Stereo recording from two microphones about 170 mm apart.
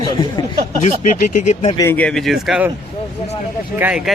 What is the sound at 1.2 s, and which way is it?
Speech, 45° left (ahead or behind).